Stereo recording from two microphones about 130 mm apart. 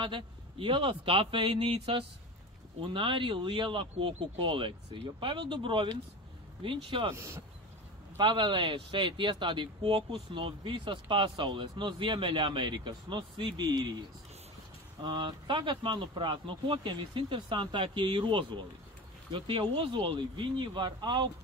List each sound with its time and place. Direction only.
0.0 s a man's voice: 40° right (ahead or behind)
7.2 s speech: 20° right (ahead or behind)
8.2 s a man's voice: 40° right (ahead or behind)
15.0 s a man's voice: 40° right (ahead or behind)